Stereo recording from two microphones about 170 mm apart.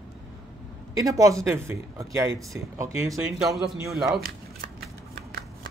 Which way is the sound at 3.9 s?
Centre (ahead or behind).